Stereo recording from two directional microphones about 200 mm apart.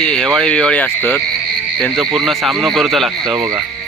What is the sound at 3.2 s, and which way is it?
Speech, 20° right (ahead or behind).